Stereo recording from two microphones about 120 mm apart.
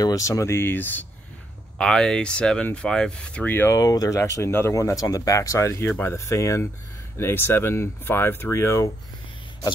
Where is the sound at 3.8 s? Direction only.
30° left (ahead or behind).